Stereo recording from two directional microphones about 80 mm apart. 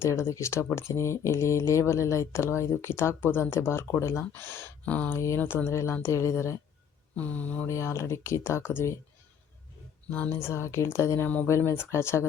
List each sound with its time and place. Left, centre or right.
0.0 s speech: left
4.9 s speech: centre
5.1 s speech: left
5.4 s speech: left
5.6 s speech: left
7.2 s speech: centre
7.7 s speech: left
10.1 s speech: left